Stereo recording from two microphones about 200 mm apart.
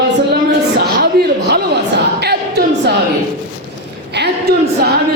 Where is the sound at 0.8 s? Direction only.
55° right (ahead or behind).